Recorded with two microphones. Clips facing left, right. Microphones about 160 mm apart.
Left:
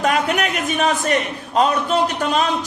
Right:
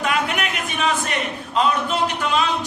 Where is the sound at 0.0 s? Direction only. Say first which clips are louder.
Left 4 dB; 45° left (ahead or behind).